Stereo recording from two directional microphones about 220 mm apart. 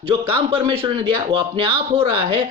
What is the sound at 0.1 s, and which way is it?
Speech, 25° right (ahead or behind).